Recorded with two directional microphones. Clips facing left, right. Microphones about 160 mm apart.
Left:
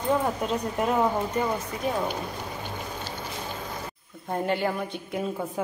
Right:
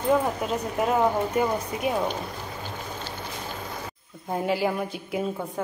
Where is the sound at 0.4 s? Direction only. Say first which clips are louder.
Even; centre (ahead or behind).